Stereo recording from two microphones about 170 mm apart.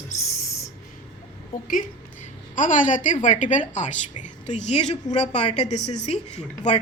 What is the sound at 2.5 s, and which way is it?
A woman's voice, 50° left (ahead or behind).